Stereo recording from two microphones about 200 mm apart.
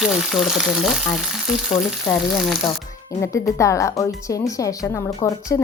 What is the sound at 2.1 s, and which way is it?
A woman's voice, 15° left (ahead or behind).